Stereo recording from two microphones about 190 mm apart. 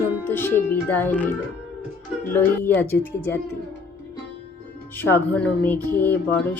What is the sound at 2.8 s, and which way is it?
Music, 10° left (ahead or behind).